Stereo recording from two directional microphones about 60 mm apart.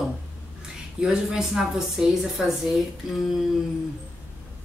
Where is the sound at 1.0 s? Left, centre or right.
Centre.